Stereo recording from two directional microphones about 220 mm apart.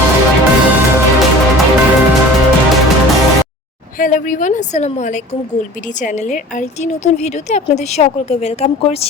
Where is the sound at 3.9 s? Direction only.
35° left (ahead or behind).